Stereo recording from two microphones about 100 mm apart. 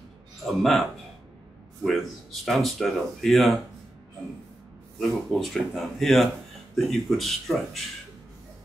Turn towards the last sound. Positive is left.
turn(degrees=0)  # may be behind; listen again after turning